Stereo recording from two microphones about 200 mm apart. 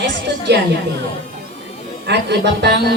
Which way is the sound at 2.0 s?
55° right (ahead or behind).